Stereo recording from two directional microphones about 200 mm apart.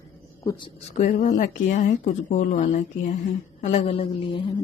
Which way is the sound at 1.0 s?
40° left (ahead or behind).